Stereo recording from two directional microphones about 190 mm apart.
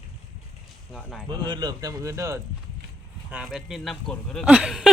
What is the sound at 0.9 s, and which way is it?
Speech, centre (ahead or behind).